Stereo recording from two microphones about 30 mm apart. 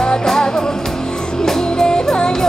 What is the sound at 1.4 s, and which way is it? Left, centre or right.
Music, centre.